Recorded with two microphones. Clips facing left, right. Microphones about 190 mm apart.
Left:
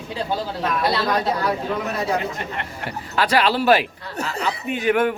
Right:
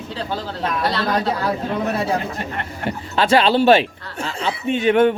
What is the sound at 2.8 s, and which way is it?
A man's voice, 25° right (ahead or behind).